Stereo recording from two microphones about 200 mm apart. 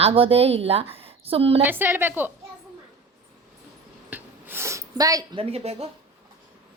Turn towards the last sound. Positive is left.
turn(degrees=-30)  # may be behind; listen again after turning